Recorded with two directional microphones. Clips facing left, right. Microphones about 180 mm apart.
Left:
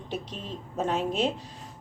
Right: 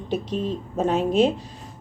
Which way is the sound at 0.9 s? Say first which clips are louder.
Right 8 dB; 10° right (ahead or behind).